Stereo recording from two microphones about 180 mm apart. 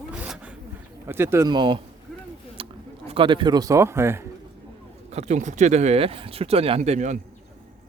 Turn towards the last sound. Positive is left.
turn(degrees=-40)  # may be behind; listen again after turning